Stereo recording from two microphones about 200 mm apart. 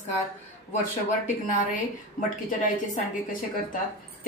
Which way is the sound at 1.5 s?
40° left (ahead or behind).